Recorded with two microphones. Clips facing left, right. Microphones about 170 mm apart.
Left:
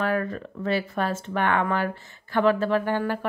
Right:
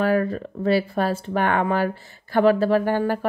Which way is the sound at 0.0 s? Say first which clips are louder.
Right 5 dB; 35° right (ahead or behind).